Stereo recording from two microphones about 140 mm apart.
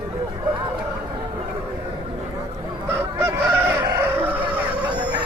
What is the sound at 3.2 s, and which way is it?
Fowl, 15° right (ahead or behind).